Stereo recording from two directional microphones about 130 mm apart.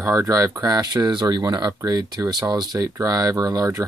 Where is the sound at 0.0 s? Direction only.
25° right (ahead or behind).